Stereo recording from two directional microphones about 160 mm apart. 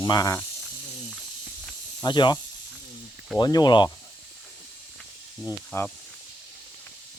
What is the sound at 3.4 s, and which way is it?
Speech, 25° left (ahead or behind).